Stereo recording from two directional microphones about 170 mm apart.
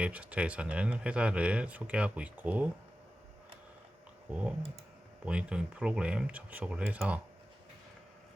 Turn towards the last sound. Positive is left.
turn(degrees=-5)  # may be behind; listen again after turning